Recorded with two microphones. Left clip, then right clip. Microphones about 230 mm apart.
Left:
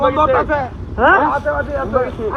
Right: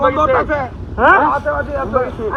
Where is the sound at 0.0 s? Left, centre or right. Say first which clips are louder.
Even; centre.